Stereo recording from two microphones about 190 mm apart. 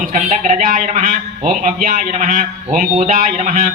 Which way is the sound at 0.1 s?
40° right (ahead or behind).